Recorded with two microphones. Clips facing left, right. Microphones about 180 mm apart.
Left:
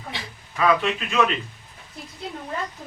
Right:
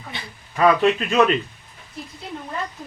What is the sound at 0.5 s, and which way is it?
Speech, 40° right (ahead or behind).